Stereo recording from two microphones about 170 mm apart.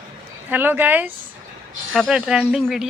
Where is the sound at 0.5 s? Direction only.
10° right (ahead or behind).